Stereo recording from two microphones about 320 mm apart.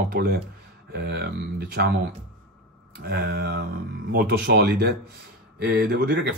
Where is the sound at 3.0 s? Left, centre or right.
Right.